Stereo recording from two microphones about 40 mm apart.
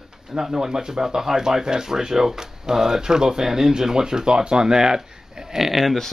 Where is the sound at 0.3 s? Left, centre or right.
Centre.